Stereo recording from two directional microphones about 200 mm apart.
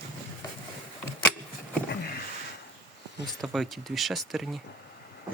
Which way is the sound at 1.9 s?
55° left (ahead or behind).